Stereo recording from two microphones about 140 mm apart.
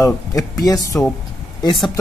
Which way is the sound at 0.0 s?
25° left (ahead or behind).